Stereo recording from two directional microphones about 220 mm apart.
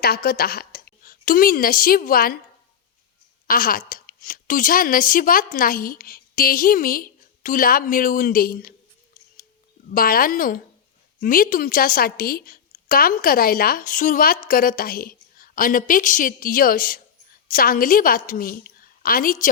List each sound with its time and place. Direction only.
0.0 s a woman's voice: 45° left (ahead or behind)
3.4 s a woman's voice: 40° left (ahead or behind)
9.9 s a woman's voice: 40° left (ahead or behind)